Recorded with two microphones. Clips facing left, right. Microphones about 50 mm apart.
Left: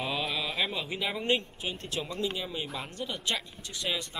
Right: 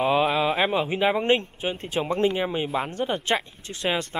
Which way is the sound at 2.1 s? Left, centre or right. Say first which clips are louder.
Right 11 dB; right.